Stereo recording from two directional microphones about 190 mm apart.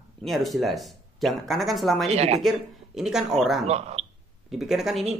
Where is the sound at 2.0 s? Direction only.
35° right (ahead or behind).